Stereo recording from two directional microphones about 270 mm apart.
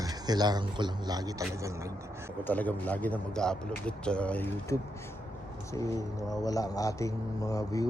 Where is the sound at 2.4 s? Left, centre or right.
Centre.